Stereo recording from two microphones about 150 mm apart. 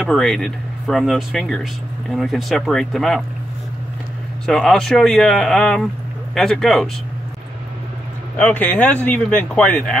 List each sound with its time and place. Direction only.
0.0 s speech: centre (ahead or behind)
4.5 s speech: 5° left (ahead or behind)
8.4 s speech: 5° left (ahead or behind)